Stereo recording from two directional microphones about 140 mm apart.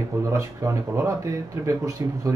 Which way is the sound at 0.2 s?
20° right (ahead or behind).